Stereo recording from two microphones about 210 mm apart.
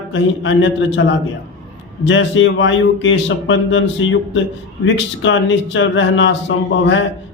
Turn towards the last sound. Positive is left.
turn(degrees=60)  # may be behind; listen again after turning